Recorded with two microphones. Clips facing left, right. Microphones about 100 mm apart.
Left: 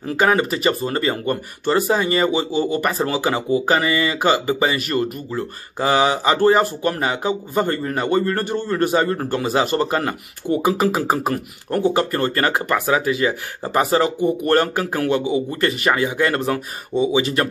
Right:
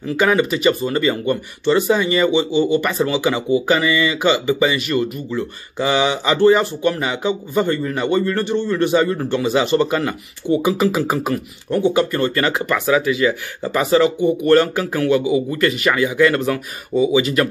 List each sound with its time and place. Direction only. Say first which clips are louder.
0.0 s speech: right 1 dB; 40° left (ahead or behind)